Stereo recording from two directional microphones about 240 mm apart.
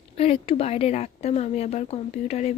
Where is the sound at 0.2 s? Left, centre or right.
Left.